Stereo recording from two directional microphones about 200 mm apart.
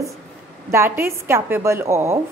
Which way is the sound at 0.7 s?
10° right (ahead or behind).